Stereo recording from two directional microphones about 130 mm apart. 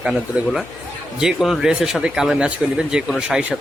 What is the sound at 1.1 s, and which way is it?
Speech, 5° right (ahead or behind).